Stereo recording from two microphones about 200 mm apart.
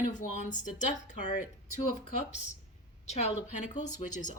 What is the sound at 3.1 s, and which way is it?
Speech, 35° left (ahead or behind).